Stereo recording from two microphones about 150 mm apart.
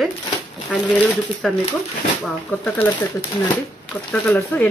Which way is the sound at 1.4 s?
Centre (ahead or behind).